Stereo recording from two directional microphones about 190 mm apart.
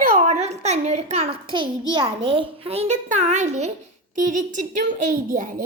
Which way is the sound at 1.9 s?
25° right (ahead or behind).